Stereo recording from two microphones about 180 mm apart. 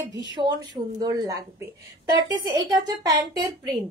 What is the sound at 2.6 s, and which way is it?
Speech, 20° right (ahead or behind).